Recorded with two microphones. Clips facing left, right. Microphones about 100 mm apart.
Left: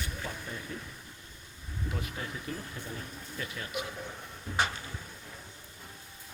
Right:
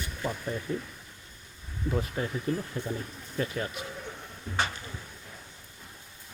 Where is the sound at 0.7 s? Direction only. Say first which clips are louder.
Right 11 dB; 25° right (ahead or behind).